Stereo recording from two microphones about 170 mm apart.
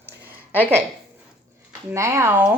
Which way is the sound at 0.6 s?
15° right (ahead or behind).